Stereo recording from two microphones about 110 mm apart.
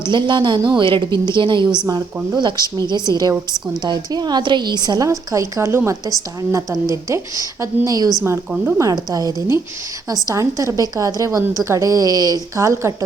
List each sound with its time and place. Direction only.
0.0 s a woman's voice: 45° right (ahead or behind)
8.2 s a woman's voice: 25° right (ahead or behind)